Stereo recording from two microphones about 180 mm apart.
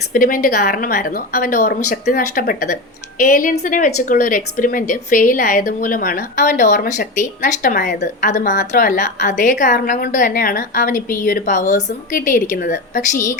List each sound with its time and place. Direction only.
0.1 s a woman's voice: 50° left (ahead or behind)